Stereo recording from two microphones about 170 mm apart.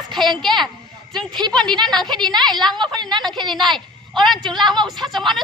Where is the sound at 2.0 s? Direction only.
25° right (ahead or behind).